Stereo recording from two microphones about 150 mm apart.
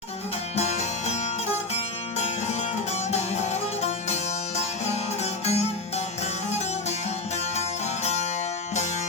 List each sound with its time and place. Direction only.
0.5 s music: 45° left (ahead or behind)
8.0 s music: 45° left (ahead or behind)